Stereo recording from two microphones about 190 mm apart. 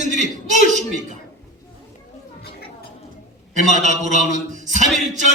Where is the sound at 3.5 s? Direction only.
40° right (ahead or behind).